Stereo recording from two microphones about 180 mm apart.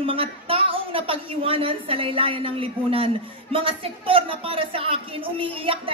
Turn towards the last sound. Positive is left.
turn(degrees=-30)  # may be behind; listen again after turning